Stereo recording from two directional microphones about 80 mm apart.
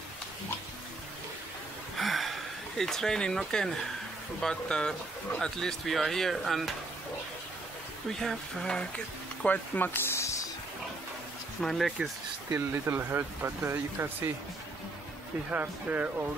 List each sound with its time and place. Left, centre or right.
2.0 s gasp: centre
2.8 s speech: centre
8.2 s speech: centre; by 10.3 s left
11.6 s speech: centre
12.5 s speech: right
15.5 s speech: right